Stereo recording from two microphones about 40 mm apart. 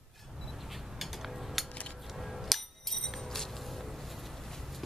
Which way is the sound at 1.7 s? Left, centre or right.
Left.